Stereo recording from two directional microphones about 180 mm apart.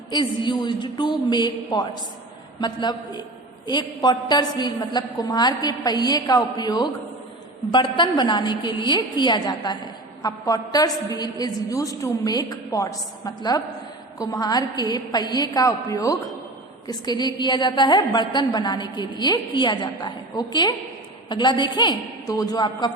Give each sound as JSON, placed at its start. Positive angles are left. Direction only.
{"t": 0.1, "sound": "a woman's voice", "side_deg": 25}